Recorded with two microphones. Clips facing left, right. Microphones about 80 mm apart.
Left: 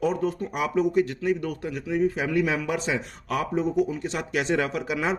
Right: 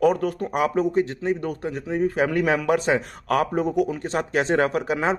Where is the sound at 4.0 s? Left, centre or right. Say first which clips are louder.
Right 4 dB; right.